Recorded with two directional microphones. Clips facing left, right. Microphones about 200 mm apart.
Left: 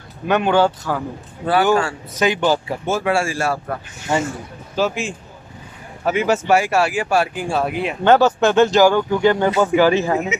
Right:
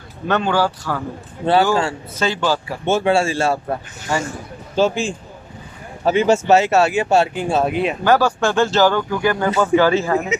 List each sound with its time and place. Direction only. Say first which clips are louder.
0.3 s speech: left 2 dB; 20° left (ahead or behind)
1.4 s speech: right 2 dB; 25° right (ahead or behind)
2.1 s speech: left 3 dB; 15° left (ahead or behind)
2.8 s speech: right 3 dB; 25° right (ahead or behind)
4.1 s a man's voice: left 2 dB; 20° left (ahead or behind)
4.7 s speech: right 3 dB; 30° right (ahead or behind)
8.0 s a man's voice: left 4 dB; 25° left (ahead or behind)